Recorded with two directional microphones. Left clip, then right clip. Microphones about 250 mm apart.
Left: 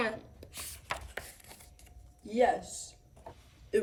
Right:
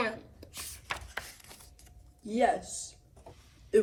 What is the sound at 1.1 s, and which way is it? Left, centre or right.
Chopping, centre.